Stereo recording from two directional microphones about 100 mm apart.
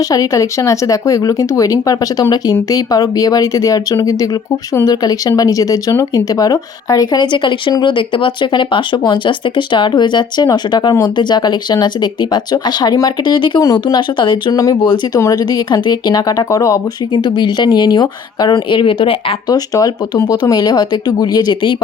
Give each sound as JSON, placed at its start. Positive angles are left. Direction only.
{"t": 0.1, "sound": "speech", "side_deg": 35}
{"t": 14.5, "sound": "speech", "side_deg": 35}
{"t": 17.1, "sound": "speech", "side_deg": 50}
{"t": 18.7, "sound": "a woman's voice", "side_deg": 55}
{"t": 19.5, "sound": "speech", "side_deg": 35}